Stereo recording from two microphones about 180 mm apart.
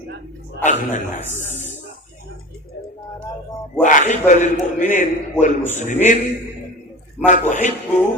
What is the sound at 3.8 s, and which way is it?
A man's voice, 45° left (ahead or behind).